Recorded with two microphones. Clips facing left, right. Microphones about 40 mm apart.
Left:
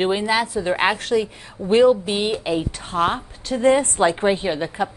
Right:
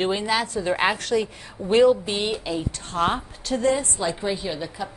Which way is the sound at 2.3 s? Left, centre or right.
Left.